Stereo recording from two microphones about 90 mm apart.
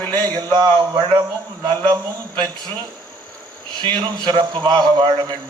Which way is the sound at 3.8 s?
50° right (ahead or behind).